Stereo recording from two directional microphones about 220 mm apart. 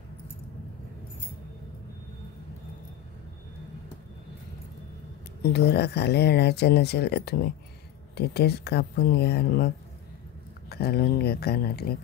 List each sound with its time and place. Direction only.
5.4 s speech: 50° left (ahead or behind)
10.7 s speech: 45° left (ahead or behind)